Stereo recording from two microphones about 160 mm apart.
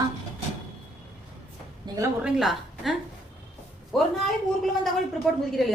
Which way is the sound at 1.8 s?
20° right (ahead or behind).